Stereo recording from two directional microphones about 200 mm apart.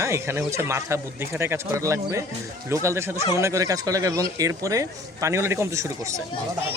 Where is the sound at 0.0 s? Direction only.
15° right (ahead or behind).